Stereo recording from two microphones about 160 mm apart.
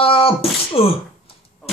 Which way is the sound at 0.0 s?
35° left (ahead or behind).